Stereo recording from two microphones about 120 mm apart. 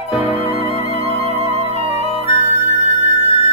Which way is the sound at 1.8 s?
60° left (ahead or behind).